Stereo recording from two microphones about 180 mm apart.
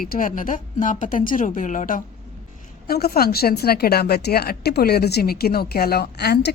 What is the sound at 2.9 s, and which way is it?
Speech, 55° left (ahead or behind).